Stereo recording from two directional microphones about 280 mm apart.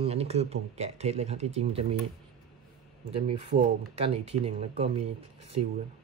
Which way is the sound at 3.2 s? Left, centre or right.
Right.